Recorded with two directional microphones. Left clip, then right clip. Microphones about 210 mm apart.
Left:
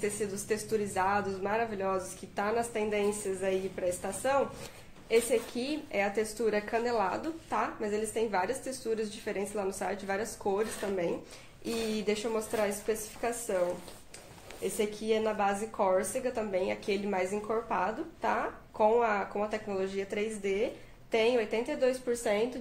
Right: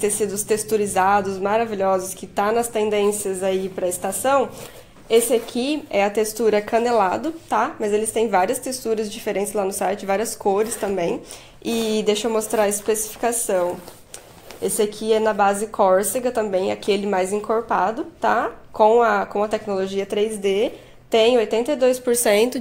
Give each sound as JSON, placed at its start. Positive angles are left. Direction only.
{"t": 0.0, "sound": "speech", "side_deg": -40}
{"t": 14.8, "sound": "speech", "side_deg": -40}